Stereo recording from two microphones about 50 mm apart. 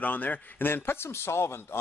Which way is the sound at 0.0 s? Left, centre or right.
Left.